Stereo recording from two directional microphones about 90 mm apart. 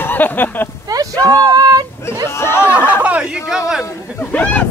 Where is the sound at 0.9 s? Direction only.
45° right (ahead or behind).